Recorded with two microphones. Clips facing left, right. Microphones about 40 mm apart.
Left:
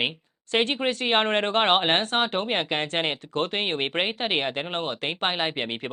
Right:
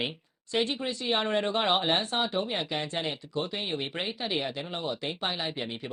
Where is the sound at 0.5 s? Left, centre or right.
Left.